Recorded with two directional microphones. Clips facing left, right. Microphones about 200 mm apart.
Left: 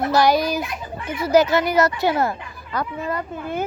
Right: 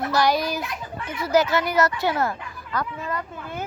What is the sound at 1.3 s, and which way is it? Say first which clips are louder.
Speech: left 4 dB; 15° left (ahead or behind).